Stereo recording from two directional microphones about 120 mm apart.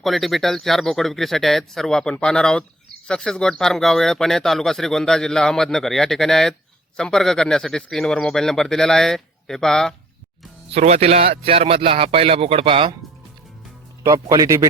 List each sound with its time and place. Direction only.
0.0 s speech: centre (ahead or behind)
10.7 s speech: 65° right (ahead or behind); by 12.9 s 50° right (ahead or behind)
14.0 s speech: 30° right (ahead or behind)